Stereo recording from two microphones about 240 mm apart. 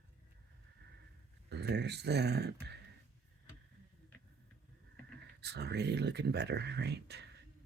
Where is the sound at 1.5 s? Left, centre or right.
Right.